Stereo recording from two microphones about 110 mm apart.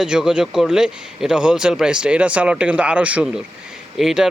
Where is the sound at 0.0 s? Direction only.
5° right (ahead or behind).